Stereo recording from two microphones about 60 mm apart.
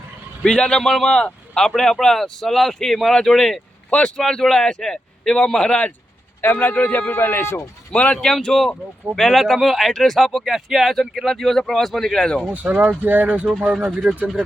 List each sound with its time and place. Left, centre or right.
0.4 s speech: centre
3.8 s speech: left
4.2 s speech: centre
6.4 s speech: left
7.9 s speech: centre
12.5 s speech: right